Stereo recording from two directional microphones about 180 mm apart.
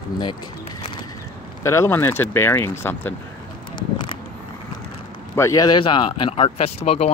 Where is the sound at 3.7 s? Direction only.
25° left (ahead or behind).